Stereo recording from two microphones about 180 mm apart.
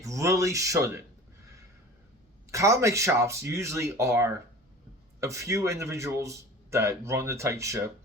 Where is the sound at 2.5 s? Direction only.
15° right (ahead or behind).